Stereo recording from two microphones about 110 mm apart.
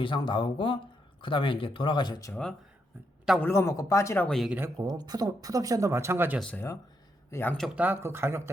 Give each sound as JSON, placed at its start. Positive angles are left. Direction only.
{"t": 0.0, "sound": "speech", "side_deg": 45}
{"t": 2.3, "sound": "speech", "side_deg": 5}
{"t": 3.4, "sound": "speech", "side_deg": 20}
{"t": 4.3, "sound": "speech", "side_deg": 0}
{"t": 4.8, "sound": "speech", "side_deg": -35}
{"t": 7.3, "sound": "speech", "side_deg": 20}
{"t": 7.8, "sound": "speech", "side_deg": -20}